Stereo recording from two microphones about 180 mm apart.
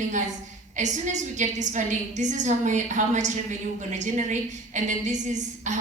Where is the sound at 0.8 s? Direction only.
40° right (ahead or behind).